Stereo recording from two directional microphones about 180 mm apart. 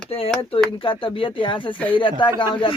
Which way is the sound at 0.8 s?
25° left (ahead or behind).